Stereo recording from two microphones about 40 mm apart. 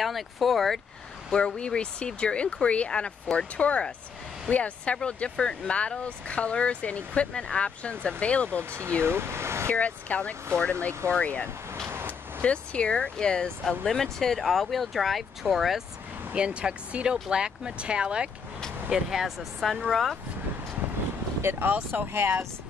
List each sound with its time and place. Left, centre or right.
0.0 s speech: centre
1.3 s speech: left
4.9 s speech: left
8.5 s speech: right
9.7 s speech: left
11.9 s vehicle: right
12.4 s speech: left
13.8 s speech: centre
16.3 s speech: right
18.9 s speech: centre
19.6 s speech: centre
21.4 s speech: right
21.6 s speech: right
22.0 s speech: right